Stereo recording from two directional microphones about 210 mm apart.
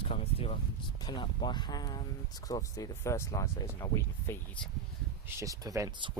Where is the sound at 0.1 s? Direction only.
25° left (ahead or behind).